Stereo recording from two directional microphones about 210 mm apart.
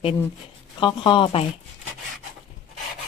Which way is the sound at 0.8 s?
25° left (ahead or behind).